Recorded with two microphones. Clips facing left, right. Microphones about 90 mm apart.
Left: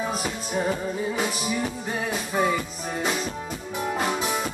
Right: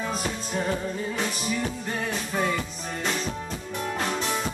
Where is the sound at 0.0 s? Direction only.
5° left (ahead or behind).